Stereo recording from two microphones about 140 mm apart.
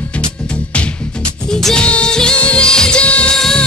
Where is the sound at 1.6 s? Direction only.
5° left (ahead or behind).